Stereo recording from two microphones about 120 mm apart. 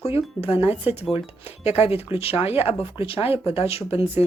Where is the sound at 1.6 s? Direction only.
60° left (ahead or behind).